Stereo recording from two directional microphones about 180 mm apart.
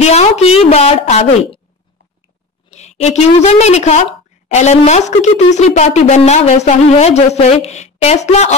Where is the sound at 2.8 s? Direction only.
40° left (ahead or behind).